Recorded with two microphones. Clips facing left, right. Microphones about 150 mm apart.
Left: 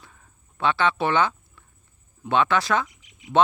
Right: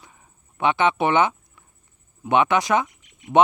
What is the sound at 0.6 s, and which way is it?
Speech, 20° right (ahead or behind).